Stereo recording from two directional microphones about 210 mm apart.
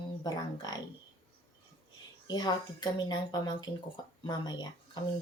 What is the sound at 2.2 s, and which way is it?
Speech, 20° left (ahead or behind).